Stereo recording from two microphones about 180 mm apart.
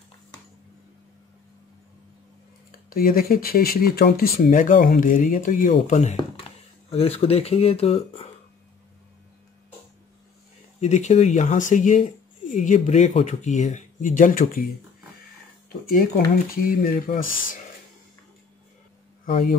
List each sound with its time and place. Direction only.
2.9 s speech: 55° left (ahead or behind); by 8.3 s 35° left (ahead or behind)
10.8 s speech: 40° left (ahead or behind)
15.9 s speech: 55° left (ahead or behind)